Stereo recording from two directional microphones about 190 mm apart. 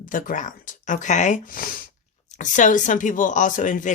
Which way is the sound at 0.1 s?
45° left (ahead or behind).